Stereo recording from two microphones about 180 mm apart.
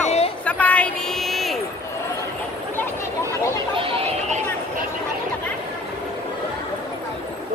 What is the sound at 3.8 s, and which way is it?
Chicken, 30° right (ahead or behind).